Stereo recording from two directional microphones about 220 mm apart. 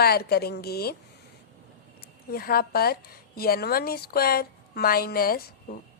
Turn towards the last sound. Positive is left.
turn(degrees=40)  # may be behind; listen again after turning